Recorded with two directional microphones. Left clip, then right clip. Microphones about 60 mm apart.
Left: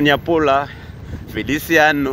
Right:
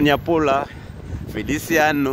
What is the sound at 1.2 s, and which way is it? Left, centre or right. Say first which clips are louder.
Speech: left 3 dB; right.